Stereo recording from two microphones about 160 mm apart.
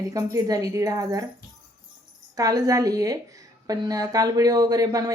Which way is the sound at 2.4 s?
20° right (ahead or behind).